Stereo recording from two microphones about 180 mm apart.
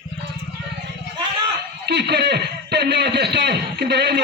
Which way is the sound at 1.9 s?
70° right (ahead or behind).